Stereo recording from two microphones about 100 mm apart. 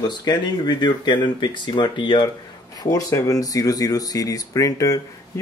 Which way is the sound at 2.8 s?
35° left (ahead or behind).